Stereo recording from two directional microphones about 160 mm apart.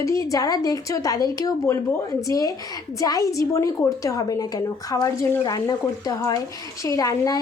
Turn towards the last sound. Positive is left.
turn(degrees=20)  # may be behind; listen again after turning